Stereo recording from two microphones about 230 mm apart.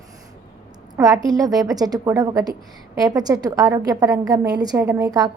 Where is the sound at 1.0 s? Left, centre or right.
Centre.